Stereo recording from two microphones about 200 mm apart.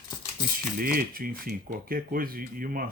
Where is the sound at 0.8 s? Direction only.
45° right (ahead or behind).